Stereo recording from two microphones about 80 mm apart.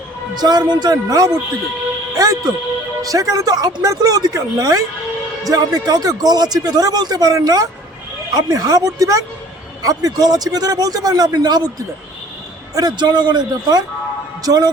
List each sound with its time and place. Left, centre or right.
0.3 s a man's voice: right
2.1 s music: right
3.0 s a man's voice: right
12.7 s a man's voice: right